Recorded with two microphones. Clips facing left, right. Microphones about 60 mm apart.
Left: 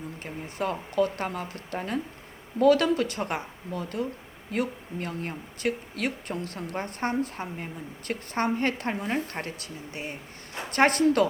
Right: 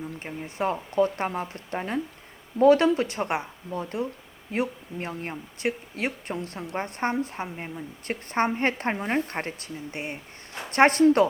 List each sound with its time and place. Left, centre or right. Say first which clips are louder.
0.2 s a woman's voice: right 2 dB; right